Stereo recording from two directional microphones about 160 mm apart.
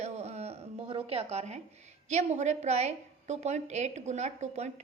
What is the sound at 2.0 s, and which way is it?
A woman's voice, 45° right (ahead or behind).